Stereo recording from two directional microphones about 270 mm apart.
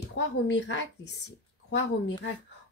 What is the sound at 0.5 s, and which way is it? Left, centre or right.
Speech, left.